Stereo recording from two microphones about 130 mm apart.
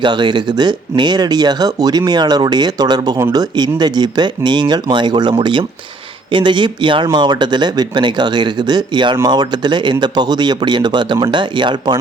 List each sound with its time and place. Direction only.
0.0 s speech: 35° right (ahead or behind)